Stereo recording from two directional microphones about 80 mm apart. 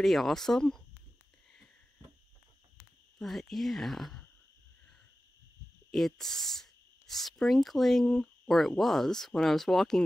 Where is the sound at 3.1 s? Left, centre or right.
Centre.